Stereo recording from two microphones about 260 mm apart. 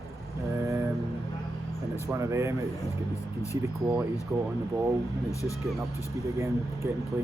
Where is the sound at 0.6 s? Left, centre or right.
Centre.